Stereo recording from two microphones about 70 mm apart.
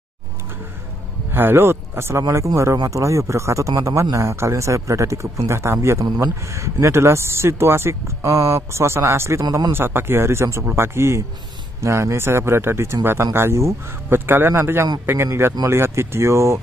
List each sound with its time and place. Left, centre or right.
1.3 s a man's voice: right